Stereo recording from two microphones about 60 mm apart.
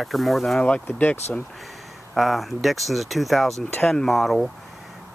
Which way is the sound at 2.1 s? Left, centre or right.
Centre.